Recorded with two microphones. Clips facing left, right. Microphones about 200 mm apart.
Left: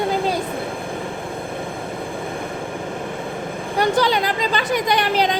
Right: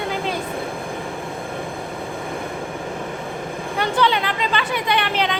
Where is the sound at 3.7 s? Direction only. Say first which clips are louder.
Left 2 dB; 40° left (ahead or behind).